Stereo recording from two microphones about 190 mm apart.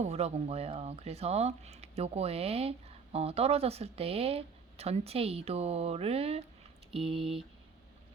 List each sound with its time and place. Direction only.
0.0 s speech: 35° right (ahead or behind)